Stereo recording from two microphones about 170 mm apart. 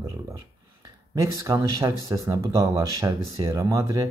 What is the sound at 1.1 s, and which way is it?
Speech, 20° right (ahead or behind).